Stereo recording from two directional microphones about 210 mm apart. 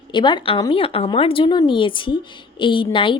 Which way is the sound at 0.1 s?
20° left (ahead or behind).